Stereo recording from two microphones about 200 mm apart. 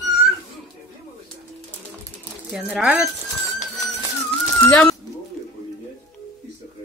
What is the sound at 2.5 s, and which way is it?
Speech, centre (ahead or behind).